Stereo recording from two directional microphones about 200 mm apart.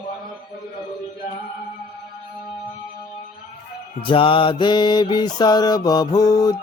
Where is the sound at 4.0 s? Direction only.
25° left (ahead or behind).